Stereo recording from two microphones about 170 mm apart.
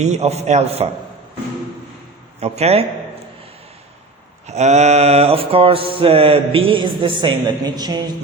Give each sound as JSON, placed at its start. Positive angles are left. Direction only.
{"t": 0.0, "sound": "mantra", "side_deg": -40}
{"t": 2.4, "sound": "mantra", "side_deg": -35}
{"t": 4.4, "sound": "mantra", "side_deg": -40}